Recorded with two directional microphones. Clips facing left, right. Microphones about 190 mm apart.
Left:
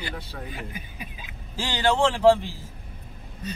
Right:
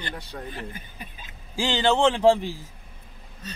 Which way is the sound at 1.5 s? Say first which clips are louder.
Right 2 dB; 20° right (ahead or behind).